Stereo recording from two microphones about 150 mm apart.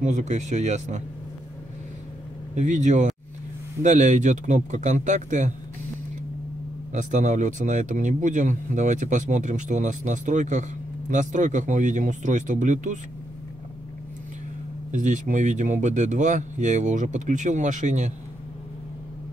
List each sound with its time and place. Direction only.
0.0 s speech: 50° right (ahead or behind)
2.5 s speech: 55° right (ahead or behind)
6.9 s speech: 55° right (ahead or behind)
14.9 s speech: 55° right (ahead or behind)